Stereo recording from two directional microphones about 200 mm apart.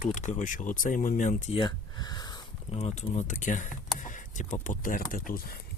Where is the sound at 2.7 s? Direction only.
35° left (ahead or behind).